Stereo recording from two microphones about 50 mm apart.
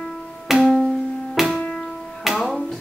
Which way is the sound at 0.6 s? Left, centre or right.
Centre.